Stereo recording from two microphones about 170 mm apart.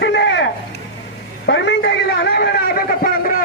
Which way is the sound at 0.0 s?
90° left.